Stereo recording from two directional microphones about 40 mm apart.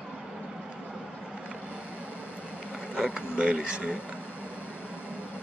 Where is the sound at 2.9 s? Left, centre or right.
Right.